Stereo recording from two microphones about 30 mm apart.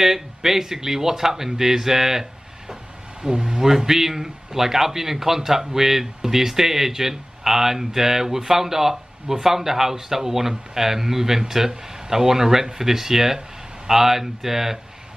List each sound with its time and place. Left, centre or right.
0.0 s a man's voice: centre
3.2 s a sound: right
3.6 s a man's voice: centre